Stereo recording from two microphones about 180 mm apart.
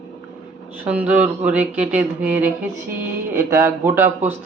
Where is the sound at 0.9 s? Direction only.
5° right (ahead or behind).